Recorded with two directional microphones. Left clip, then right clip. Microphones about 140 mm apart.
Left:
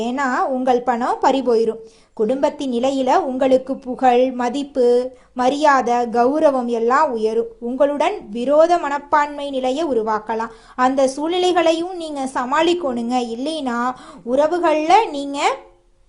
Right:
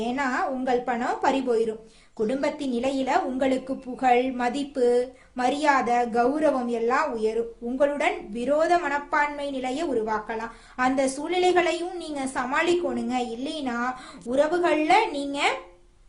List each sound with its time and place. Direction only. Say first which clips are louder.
0.0 s a woman's voice: left 6 dB; 40° left (ahead or behind)
14.3 s a woman's voice: left 6 dB; 30° left (ahead or behind)